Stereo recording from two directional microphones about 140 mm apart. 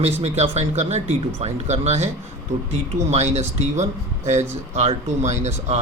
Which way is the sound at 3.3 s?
50° right (ahead or behind).